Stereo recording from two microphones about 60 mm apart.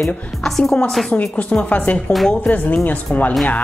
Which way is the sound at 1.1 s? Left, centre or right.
Left.